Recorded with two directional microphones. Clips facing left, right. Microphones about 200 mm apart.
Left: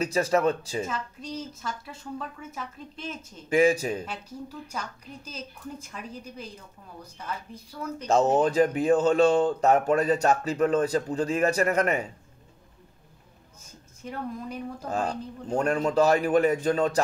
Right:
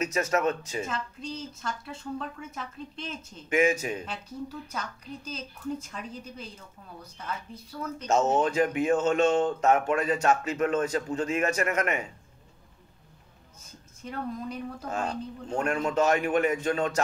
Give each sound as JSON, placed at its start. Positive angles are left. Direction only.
{"t": 0.0, "sound": "speech", "side_deg": 35}
{"t": 0.8, "sound": "a woman's voice", "side_deg": 10}
{"t": 3.4, "sound": "speech", "side_deg": 35}
{"t": 4.6, "sound": "a woman's voice", "side_deg": 10}
{"t": 8.1, "sound": "speech", "side_deg": 35}
{"t": 14.0, "sound": "a woman's voice", "side_deg": 10}
{"t": 14.9, "sound": "speech", "side_deg": 35}